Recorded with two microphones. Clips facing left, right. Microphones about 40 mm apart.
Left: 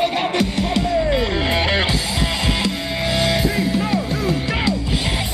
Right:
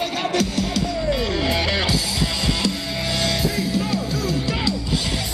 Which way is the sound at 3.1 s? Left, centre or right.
Left.